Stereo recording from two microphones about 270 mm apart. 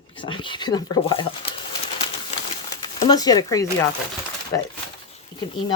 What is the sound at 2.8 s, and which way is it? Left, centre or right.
Speech, centre.